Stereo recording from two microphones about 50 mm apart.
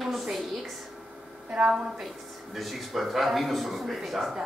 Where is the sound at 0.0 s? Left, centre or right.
Centre.